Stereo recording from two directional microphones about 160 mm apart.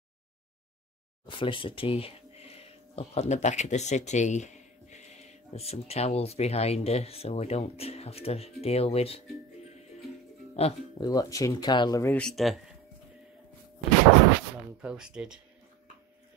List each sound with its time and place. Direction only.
1.2 s speech: 30° left (ahead or behind)
10.6 s speech: 40° left (ahead or behind)
11.0 s speech: 20° left (ahead or behind)
12.2 s speech: centre (ahead or behind)
14.8 s speech: 5° right (ahead or behind)